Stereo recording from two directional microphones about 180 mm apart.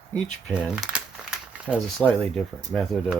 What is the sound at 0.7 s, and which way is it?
Crumpling, centre (ahead or behind).